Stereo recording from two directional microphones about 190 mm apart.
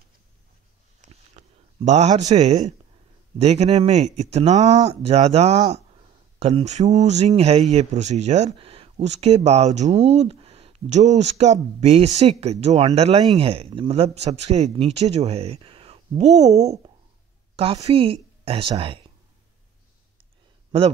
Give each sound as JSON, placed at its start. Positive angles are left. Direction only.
{"t": 1.9, "sound": "speech", "side_deg": -35}